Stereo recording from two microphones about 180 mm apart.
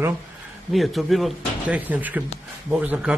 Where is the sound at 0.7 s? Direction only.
Centre (ahead or behind).